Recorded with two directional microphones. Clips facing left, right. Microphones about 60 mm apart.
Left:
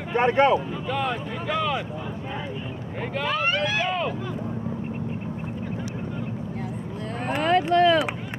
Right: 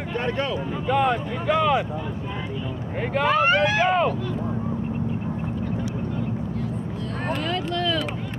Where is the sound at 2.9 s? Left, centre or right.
Right.